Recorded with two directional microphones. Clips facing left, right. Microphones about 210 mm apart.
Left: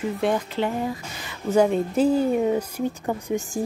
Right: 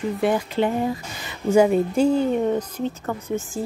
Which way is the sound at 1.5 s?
10° right (ahead or behind).